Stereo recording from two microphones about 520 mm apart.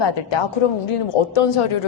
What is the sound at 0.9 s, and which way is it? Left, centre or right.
Speech, left.